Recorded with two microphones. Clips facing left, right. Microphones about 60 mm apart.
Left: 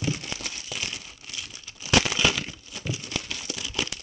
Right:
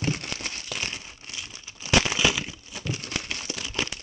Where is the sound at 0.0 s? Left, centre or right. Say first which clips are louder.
Right 1 dB; right.